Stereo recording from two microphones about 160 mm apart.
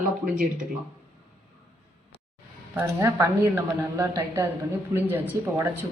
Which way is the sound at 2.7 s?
20° right (ahead or behind).